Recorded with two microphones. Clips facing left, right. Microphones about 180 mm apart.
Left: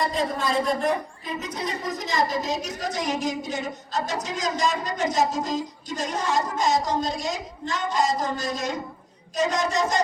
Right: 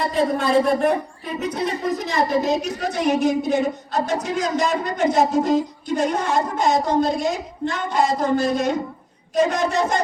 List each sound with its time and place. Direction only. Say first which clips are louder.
0.1 s a woman's voice: right 7 dB; 60° right (ahead or behind)